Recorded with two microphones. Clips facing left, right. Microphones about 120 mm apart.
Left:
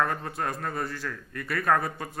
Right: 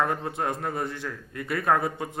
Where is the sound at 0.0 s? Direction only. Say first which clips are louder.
Right 2 dB; 20° right (ahead or behind).